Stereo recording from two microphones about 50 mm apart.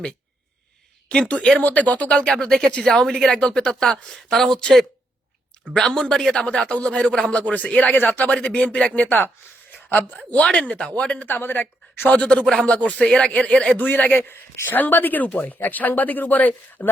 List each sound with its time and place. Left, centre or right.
1.1 s a man's voice: left
1.6 s speech: left
2.0 s speech: centre
5.7 s a man's voice: centre; by 8.3 s left
8.3 s a man's voice: left
9.0 s speech: left
9.7 s a sound: left
10.4 s a man's voice: centre
11.3 s speech: left
12.1 s a man's voice: left
13.1 s speech: centre
13.3 s a man's voice: left
13.7 s speech: left